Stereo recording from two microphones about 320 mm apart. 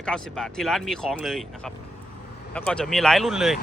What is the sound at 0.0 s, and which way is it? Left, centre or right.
Speech, centre.